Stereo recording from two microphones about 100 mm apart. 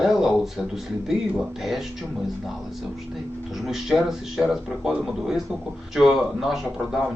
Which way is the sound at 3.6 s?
5° right (ahead or behind).